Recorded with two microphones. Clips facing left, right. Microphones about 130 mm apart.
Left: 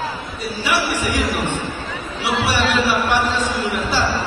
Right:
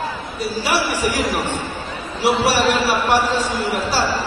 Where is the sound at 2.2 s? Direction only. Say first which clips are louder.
Right 4 dB; 40° right (ahead or behind).